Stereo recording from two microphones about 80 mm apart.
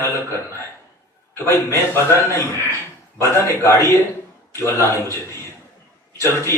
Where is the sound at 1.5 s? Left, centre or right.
Left.